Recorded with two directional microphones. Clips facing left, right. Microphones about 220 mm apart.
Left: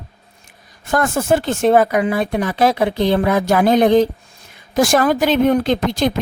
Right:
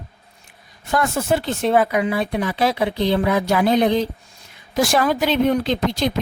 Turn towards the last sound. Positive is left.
turn(degrees=50)  # may be behind; listen again after turning